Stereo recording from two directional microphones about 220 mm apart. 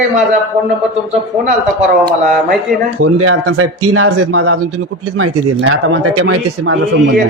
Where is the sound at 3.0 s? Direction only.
75° right (ahead or behind).